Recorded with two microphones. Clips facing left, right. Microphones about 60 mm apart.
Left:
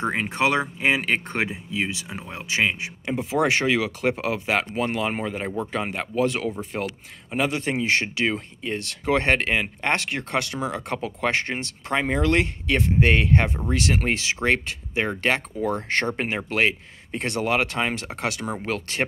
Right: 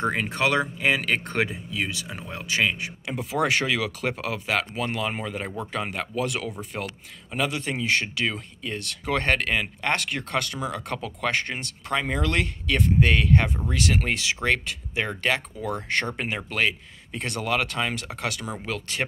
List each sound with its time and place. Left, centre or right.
0.0 s speech: left